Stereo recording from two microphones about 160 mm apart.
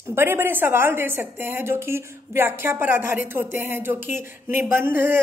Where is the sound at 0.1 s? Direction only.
15° right (ahead or behind).